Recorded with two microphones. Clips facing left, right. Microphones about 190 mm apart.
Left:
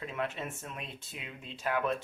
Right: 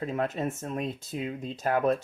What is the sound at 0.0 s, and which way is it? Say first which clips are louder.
Speech: right 7 dB; 40° right (ahead or behind).